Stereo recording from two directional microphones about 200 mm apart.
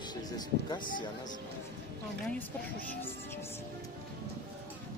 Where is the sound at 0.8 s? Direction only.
40° left (ahead or behind).